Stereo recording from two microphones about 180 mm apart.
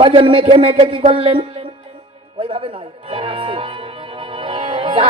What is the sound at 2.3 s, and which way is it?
Music, 30° right (ahead or behind).